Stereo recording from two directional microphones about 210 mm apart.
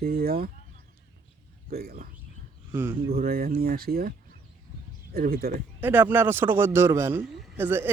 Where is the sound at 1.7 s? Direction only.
45° right (ahead or behind).